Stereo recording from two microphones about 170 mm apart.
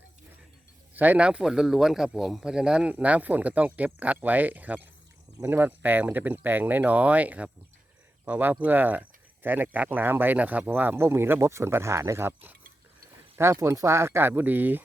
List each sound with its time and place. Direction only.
0.9 s speech: 10° right (ahead or behind)